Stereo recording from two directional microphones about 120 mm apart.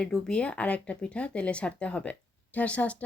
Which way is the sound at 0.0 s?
5° left (ahead or behind).